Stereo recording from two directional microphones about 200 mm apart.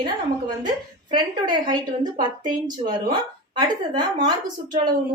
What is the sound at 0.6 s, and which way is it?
A woman's voice, 20° right (ahead or behind).